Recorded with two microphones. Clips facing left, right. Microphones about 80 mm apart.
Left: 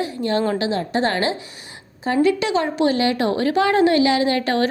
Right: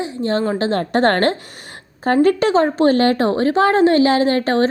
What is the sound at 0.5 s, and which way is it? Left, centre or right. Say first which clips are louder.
A woman's voice: right 4 dB; right.